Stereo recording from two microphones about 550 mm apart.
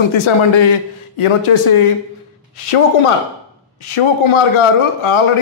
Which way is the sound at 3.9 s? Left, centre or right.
Left.